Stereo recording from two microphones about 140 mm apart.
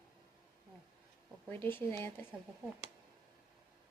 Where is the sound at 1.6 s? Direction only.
15° left (ahead or behind).